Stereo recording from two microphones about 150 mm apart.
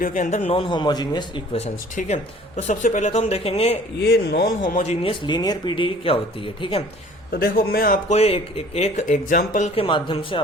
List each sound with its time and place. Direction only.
0.0 s speech: 60° left (ahead or behind); by 1.2 s 30° left (ahead or behind)
1.5 s speech: 50° left (ahead or behind)
4.1 s speech: 90° left
4.7 s speech: 50° left (ahead or behind)
4.9 s speech: 35° left (ahead or behind)
7.3 s a man's voice: 90° left; by 7.9 s 75° left (ahead or behind)
8.1 s speech: 40° left (ahead or behind); by 9.6 s 65° left (ahead or behind)
9.6 s speech: 35° left (ahead or behind)